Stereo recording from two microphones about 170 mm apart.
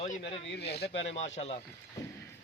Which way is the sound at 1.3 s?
40° left (ahead or behind).